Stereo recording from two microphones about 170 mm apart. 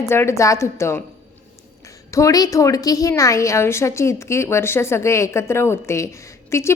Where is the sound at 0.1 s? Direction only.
15° left (ahead or behind).